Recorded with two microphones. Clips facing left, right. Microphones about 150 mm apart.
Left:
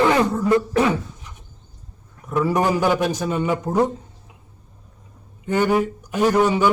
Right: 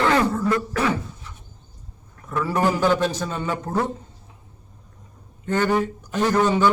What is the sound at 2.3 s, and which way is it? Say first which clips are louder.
A man's voice: left 3 dB; 15° left (ahead or behind).